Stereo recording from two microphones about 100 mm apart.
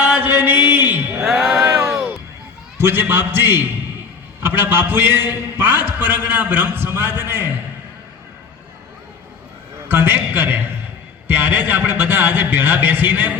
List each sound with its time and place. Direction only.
0.0 s mantra: 20° right (ahead or behind)
1.2 s music: 5° right (ahead or behind)
1.6 s a sound: 20° right (ahead or behind)
2.7 s speech: 20° right (ahead or behind)
9.9 s speech: 20° right (ahead or behind)